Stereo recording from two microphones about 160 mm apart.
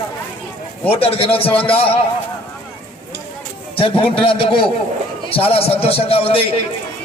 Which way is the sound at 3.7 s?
35° left (ahead or behind).